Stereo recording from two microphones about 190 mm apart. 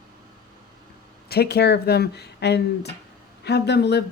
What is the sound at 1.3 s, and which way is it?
A woman's voice, 55° left (ahead or behind).